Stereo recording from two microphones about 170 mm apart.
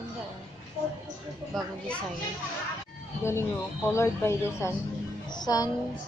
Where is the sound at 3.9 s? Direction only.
15° left (ahead or behind).